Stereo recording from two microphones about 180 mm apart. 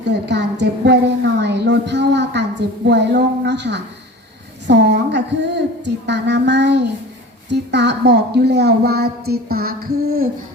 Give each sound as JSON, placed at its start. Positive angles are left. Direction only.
{"t": 0.0, "sound": "a woman's voice", "side_deg": -75}